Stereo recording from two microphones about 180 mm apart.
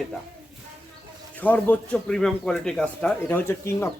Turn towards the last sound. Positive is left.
turn(degrees=15)  # may be behind; listen again after turning